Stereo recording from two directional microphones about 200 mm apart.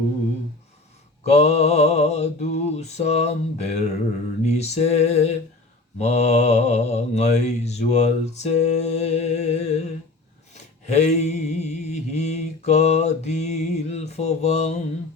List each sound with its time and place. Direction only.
1.3 s mantra: 35° left (ahead or behind)